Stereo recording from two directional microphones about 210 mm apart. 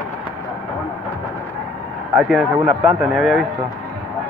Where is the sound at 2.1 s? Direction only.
5° right (ahead or behind).